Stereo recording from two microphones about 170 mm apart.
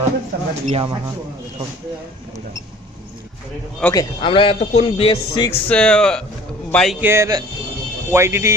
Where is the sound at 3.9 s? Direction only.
30° left (ahead or behind).